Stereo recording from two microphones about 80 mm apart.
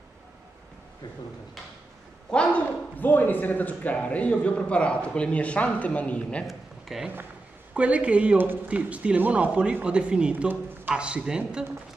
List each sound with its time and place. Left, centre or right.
2.3 s a man's voice: centre
6.4 s a sound: centre
7.7 s speech: centre